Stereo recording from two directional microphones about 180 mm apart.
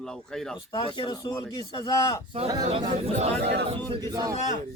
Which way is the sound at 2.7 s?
35° right (ahead or behind).